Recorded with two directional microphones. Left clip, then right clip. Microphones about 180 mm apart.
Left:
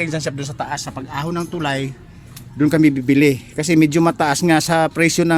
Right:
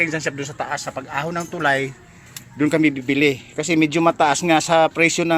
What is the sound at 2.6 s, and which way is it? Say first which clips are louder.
A man's voice: left 3 dB; 30° left (ahead or behind).